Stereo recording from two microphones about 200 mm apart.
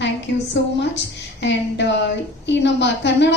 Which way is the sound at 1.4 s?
60° left (ahead or behind).